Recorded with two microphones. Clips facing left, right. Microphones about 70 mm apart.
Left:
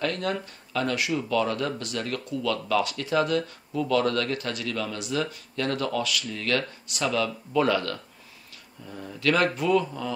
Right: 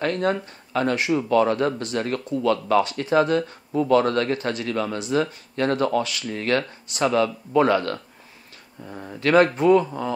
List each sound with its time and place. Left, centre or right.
0.0 s speech: right